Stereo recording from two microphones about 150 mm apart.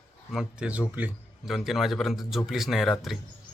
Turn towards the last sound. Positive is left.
turn(degrees=0)  # may be behind; listen again after turning